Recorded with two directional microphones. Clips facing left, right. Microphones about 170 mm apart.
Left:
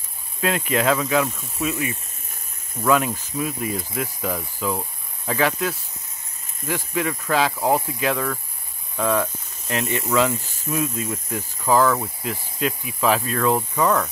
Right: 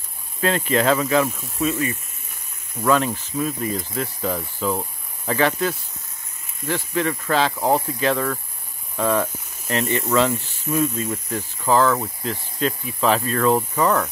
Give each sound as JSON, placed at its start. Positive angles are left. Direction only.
{"t": 0.4, "sound": "speech", "side_deg": 5}